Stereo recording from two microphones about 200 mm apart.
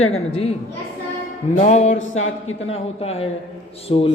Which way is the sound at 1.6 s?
35° left (ahead or behind).